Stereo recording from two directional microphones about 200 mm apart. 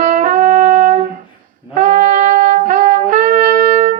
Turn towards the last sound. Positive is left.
turn(degrees=-40)  # may be behind; listen again after turning